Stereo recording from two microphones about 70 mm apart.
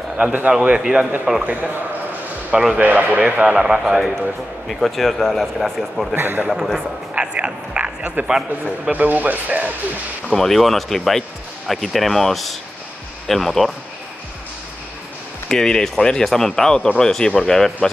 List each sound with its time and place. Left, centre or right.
0.2 s a man's voice: right; by 6.0 s centre
6.1 s speech: right
6.5 s speech: centre
7.2 s frog: centre
8.3 s a man's voice: centre
8.9 s speech: right
10.3 s speech: centre
15.4 s speech: centre